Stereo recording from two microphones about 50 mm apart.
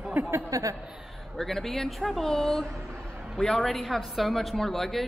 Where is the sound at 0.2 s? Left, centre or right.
Right.